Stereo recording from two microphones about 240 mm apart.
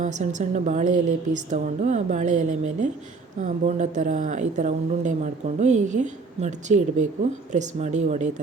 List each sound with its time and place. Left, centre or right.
0.0 s speech: right